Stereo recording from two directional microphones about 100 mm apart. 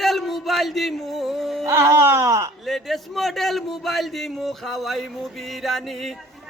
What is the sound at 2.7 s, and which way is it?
Music, centre (ahead or behind).